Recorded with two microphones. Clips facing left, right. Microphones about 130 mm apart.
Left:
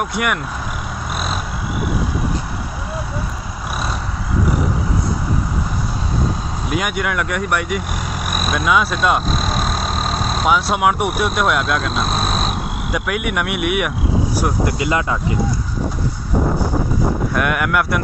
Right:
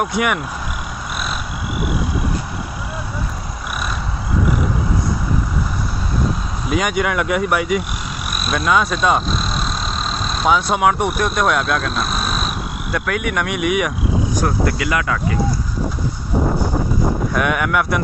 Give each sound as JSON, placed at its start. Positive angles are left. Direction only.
{"t": 0.0, "sound": "speech", "side_deg": 0}
{"t": 6.7, "sound": "speech", "side_deg": 5}
{"t": 9.3, "sound": "vehicle", "side_deg": 50}
{"t": 10.4, "sound": "speech", "side_deg": 5}
{"t": 14.7, "sound": "speech", "side_deg": 25}
{"t": 17.3, "sound": "speech", "side_deg": 0}